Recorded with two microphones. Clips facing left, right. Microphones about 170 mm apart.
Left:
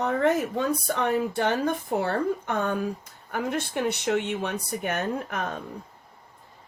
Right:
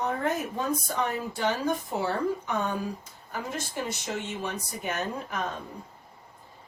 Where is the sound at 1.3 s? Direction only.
60° left (ahead or behind).